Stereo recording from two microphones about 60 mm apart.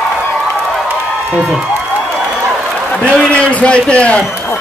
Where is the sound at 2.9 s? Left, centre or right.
Centre.